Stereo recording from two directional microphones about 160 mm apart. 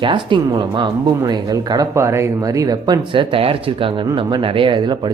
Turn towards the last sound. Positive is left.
turn(degrees=-30)  # may be behind; listen again after turning